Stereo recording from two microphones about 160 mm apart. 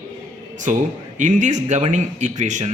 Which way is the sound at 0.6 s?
50° right (ahead or behind).